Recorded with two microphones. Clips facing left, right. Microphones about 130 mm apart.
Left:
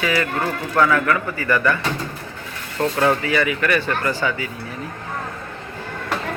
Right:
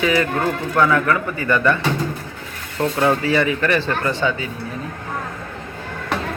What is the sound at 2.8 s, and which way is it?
Speech, 15° right (ahead or behind).